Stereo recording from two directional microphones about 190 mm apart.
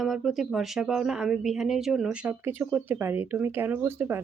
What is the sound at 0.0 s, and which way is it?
Speech, centre (ahead or behind).